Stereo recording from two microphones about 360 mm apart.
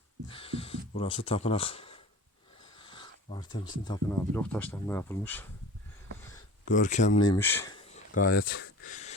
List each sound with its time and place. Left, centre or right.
0.3 s speech: centre
6.7 s speech: left
7.3 s speech: centre
7.9 s a sound: left